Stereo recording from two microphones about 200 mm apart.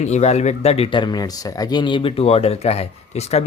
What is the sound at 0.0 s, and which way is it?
Speech, 35° left (ahead or behind).